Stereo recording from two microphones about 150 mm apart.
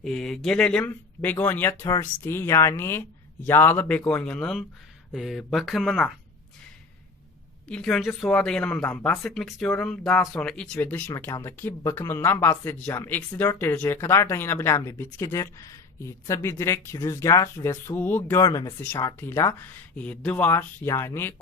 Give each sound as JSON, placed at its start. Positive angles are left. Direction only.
{"t": 0.0, "sound": "a woman's voice", "side_deg": 5}
{"t": 7.7, "sound": "a woman's voice", "side_deg": 5}
{"t": 11.1, "sound": "speech", "side_deg": 20}
{"t": 20.0, "sound": "speech", "side_deg": 10}